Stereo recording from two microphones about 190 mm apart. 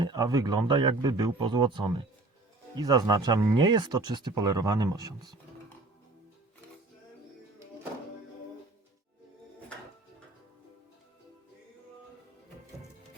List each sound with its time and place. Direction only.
0.0 s speech: 20° right (ahead or behind)